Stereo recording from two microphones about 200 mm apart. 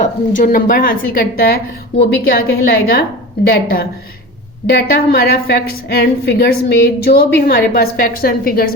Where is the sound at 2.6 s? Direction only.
50° left (ahead or behind).